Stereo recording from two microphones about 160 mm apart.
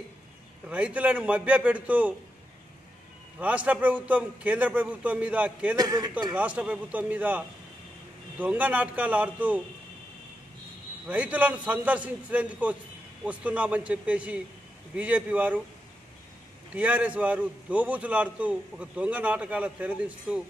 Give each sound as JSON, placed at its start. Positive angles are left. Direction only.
{"t": 0.7, "sound": "a man's voice", "side_deg": -10}
{"t": 3.3, "sound": "a man's voice", "side_deg": -10}
{"t": 5.8, "sound": "a man's voice", "side_deg": -25}
{"t": 6.3, "sound": "a man's voice", "side_deg": -10}
{"t": 11.1, "sound": "a man's voice", "side_deg": -10}
{"t": 16.7, "sound": "a man's voice", "side_deg": -10}